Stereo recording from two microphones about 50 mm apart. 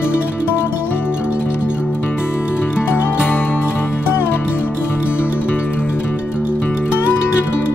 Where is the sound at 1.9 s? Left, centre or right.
Left.